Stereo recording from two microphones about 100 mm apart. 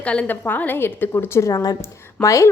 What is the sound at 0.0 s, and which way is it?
A woman's voice, 15° left (ahead or behind).